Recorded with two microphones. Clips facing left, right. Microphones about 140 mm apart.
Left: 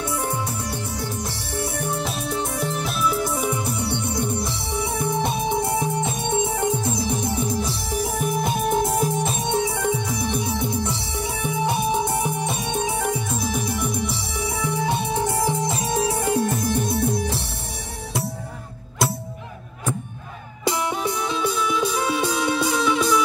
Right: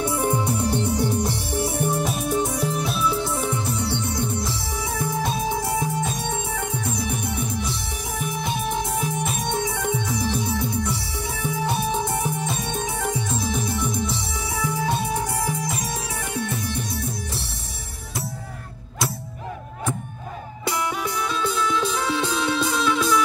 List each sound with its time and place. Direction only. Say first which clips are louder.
0.0 s music: right 3 dB; 20° right (ahead or behind)
2.4 s music: right 1 dB; centre (ahead or behind); by 9.5 s 30° left (ahead or behind)
9.5 s music: left 3 dB; 15° left (ahead or behind); by 17.5 s 60° left (ahead or behind)
20.6 s music: left 3 dB; 20° left (ahead or behind)